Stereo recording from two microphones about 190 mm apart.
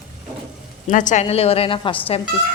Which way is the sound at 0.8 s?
40° left (ahead or behind).